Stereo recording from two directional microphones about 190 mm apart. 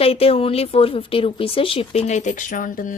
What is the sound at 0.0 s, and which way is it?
Speech, 30° left (ahead or behind).